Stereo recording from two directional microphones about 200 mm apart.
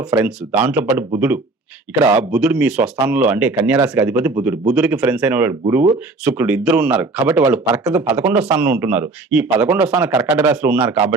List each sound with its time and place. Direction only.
0.0 s a man's voice: 15° right (ahead or behind)
6.2 s a man's voice: 10° right (ahead or behind)
8.6 s a man's voice: 5° right (ahead or behind)